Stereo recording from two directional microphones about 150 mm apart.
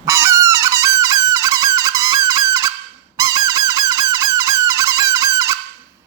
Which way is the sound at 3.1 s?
25° right (ahead or behind).